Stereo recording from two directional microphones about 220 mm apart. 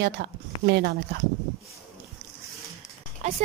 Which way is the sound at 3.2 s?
30° right (ahead or behind).